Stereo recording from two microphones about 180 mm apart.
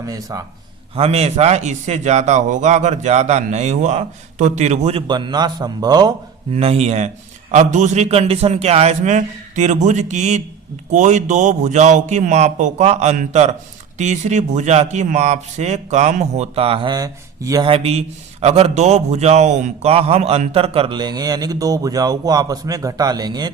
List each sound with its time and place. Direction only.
0.0 s a man's voice: 20° right (ahead or behind)
0.9 s speech: 35° right (ahead or behind)
6.5 s speech: 35° right (ahead or behind)